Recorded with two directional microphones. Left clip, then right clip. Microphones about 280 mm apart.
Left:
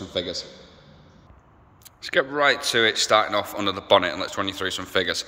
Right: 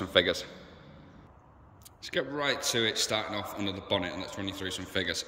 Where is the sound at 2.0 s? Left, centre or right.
Centre.